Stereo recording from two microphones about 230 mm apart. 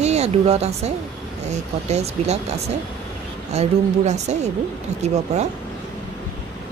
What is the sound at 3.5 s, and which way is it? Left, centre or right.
Speech, right.